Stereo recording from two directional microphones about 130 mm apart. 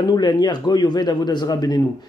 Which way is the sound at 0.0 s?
30° left (ahead or behind).